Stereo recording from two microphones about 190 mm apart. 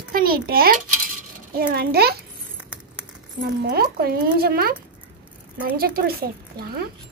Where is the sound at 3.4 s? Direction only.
55° right (ahead or behind).